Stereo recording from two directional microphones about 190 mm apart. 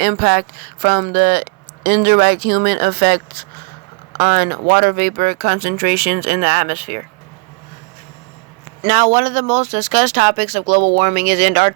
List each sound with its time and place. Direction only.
0.0 s speech: 55° right (ahead or behind)
8.9 s speech: 40° right (ahead or behind)